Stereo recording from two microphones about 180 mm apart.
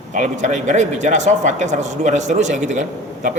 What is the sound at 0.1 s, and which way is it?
A man's voice, 45° right (ahead or behind).